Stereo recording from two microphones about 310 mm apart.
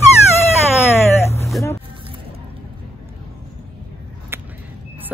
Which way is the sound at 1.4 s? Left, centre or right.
Centre.